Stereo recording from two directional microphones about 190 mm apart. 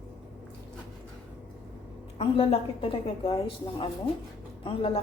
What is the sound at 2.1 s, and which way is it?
A woman's voice, 30° left (ahead or behind).